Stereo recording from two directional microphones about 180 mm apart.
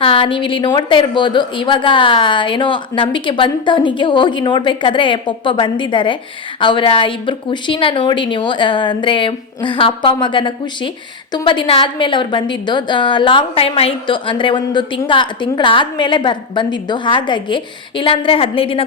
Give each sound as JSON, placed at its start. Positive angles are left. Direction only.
{"t": 0.0, "sound": "a woman's voice", "side_deg": 30}